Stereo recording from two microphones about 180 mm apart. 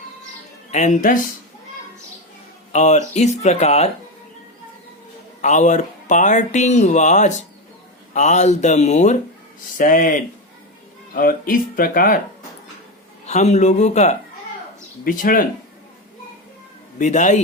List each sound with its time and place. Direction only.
0.7 s speech: 40° left (ahead or behind)
2.7 s speech: 40° left (ahead or behind)
5.4 s speech: 40° left (ahead or behind)
13.2 s speech: 40° left (ahead or behind)
17.0 s speech: 40° left (ahead or behind)